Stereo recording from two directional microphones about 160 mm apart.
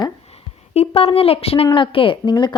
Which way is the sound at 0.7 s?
35° left (ahead or behind).